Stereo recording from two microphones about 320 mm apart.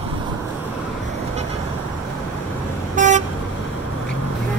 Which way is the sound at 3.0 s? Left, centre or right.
Right.